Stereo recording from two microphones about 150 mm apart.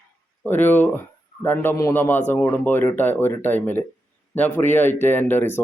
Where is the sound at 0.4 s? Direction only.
15° left (ahead or behind).